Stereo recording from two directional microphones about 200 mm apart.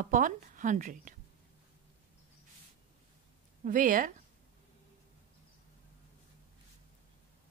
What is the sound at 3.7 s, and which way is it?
Speech, 40° right (ahead or behind).